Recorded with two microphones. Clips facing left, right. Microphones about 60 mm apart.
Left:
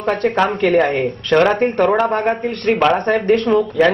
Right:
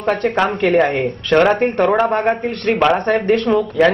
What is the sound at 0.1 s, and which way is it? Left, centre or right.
Speech, centre.